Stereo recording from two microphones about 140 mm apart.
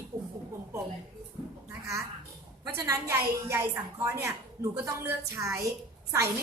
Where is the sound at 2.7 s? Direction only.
20° right (ahead or behind).